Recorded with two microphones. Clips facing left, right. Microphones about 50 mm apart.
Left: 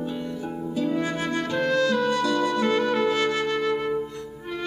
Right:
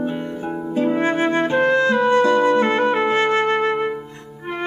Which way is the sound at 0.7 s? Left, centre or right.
Right.